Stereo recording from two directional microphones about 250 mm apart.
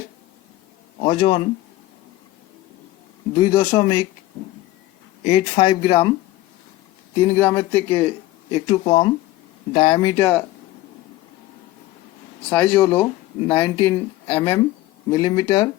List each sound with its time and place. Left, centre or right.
1.0 s speech: centre
3.3 s speech: centre
5.2 s speech: left
7.2 s speech: centre
8.5 s speech: centre
12.5 s speech: centre